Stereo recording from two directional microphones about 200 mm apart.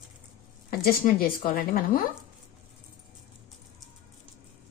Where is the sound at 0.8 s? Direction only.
45° left (ahead or behind).